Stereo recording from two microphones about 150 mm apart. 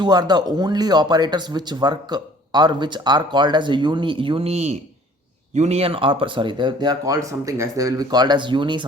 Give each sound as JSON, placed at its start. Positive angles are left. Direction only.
{"t": 0.0, "sound": "speech", "side_deg": -25}